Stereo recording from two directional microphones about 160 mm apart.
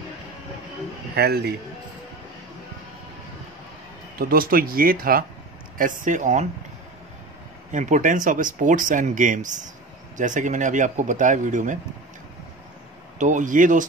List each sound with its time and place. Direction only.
1.1 s a man's voice: 85° right
4.2 s speech: 65° right (ahead or behind)
7.7 s speech: 50° right (ahead or behind)
13.2 s speech: 55° right (ahead or behind)